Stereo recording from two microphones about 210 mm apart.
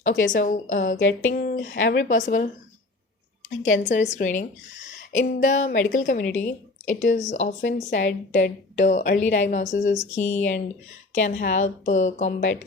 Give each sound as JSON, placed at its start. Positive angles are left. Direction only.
{"t": 0.3, "sound": "a woman's voice", "side_deg": 40}
{"t": 0.9, "sound": "a sound", "side_deg": 65}
{"t": 1.3, "sound": "a woman's voice", "side_deg": 45}
{"t": 3.6, "sound": "a woman's voice", "side_deg": 35}